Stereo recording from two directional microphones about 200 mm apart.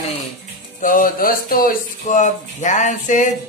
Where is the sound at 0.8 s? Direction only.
45° left (ahead or behind).